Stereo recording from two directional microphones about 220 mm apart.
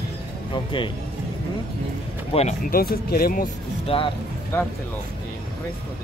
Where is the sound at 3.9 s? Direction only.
25° left (ahead or behind).